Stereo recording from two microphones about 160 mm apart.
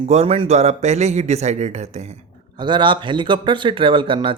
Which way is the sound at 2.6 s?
30° right (ahead or behind).